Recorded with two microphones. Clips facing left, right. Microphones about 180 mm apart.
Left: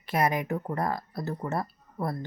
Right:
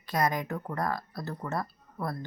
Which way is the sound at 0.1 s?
25° left (ahead or behind).